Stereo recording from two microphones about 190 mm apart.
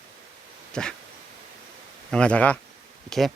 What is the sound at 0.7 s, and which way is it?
Dog, 5° left (ahead or behind).